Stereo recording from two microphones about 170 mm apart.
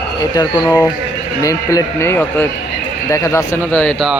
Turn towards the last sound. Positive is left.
turn(degrees=10)  # may be behind; listen again after turning